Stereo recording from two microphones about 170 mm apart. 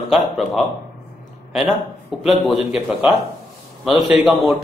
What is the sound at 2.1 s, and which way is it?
Speech, centre (ahead or behind).